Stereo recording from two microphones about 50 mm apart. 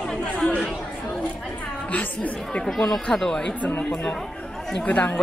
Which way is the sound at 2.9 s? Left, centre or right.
Centre.